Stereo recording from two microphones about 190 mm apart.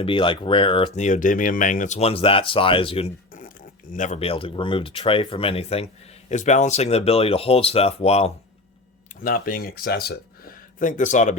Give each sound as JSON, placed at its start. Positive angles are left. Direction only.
{"t": 0.0, "sound": "speech", "side_deg": 25}
{"t": 3.9, "sound": "speech", "side_deg": 40}
{"t": 9.2, "sound": "speech", "side_deg": 50}